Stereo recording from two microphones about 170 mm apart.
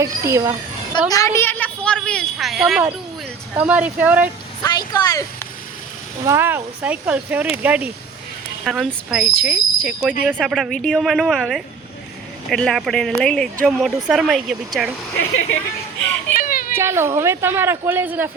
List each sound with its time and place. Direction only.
0.0 s a woman's voice: 15° right (ahead or behind)
0.9 s a woman's voice: 20° left (ahead or behind); by 4.3 s 10° right (ahead or behind)
4.6 s speech: 20° left (ahead or behind)
6.2 s a woman's voice: 15° right (ahead or behind)
16.4 s children playing: 55° left (ahead or behind)
16.7 s a woman's voice: 15° right (ahead or behind)